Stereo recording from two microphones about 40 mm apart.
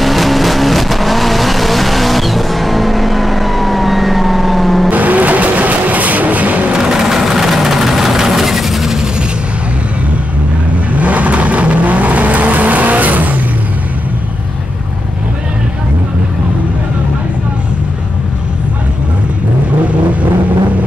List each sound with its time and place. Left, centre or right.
0.0 s vehicle: centre
4.9 s music: right
6.9 s vehicle: centre
10.9 s vehicle: right